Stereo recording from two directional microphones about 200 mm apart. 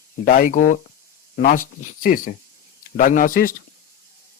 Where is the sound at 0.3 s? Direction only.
40° left (ahead or behind).